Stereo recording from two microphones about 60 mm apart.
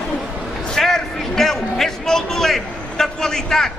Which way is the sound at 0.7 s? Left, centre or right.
Centre.